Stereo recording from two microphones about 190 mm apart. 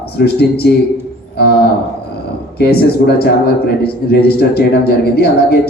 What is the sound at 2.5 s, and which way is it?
A man's voice, 55° left (ahead or behind).